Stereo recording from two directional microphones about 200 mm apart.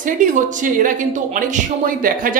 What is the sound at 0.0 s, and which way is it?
Speech, 40° right (ahead or behind).